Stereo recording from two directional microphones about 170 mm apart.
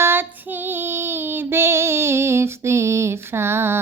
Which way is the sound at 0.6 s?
10° right (ahead or behind).